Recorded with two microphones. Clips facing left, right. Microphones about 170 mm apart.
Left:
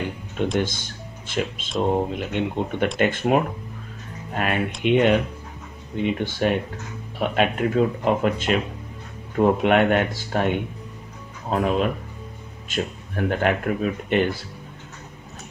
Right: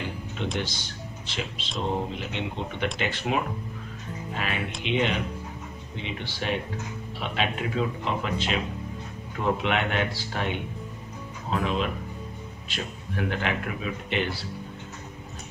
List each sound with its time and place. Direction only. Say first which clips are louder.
0.6 s speech: left 7 dB; 50° left (ahead or behind)